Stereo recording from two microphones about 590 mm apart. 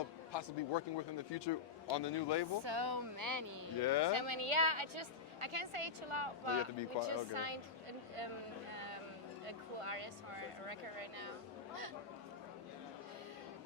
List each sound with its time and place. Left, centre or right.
0.3 s a man's voice: left
2.6 s speech: right
3.8 s speech: left
4.1 s a woman's voice: right
8.7 s music: right
9.5 s a woman's voice: right